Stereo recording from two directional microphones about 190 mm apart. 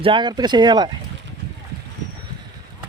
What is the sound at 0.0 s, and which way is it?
Speech, 25° right (ahead or behind).